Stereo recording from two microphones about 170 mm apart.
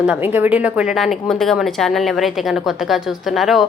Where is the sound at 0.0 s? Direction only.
10° right (ahead or behind).